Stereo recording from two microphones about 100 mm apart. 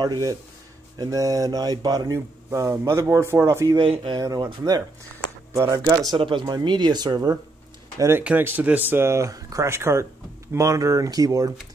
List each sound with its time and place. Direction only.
0.0 s a man's voice: 35° right (ahead or behind)
3.8 s speech: 60° right (ahead or behind)
4.2 s a man's voice: 35° right (ahead or behind)
5.5 s a man's voice: 30° right (ahead or behind)
6.1 s speech: 55° right (ahead or behind)
8.2 s a man's voice: 10° right (ahead or behind); by 11.5 s 35° right (ahead or behind)